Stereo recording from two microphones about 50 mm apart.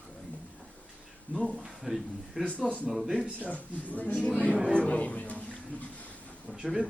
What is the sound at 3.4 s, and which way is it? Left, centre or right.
Speech, left.